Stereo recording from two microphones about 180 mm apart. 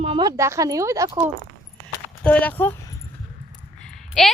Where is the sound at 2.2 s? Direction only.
10° left (ahead or behind).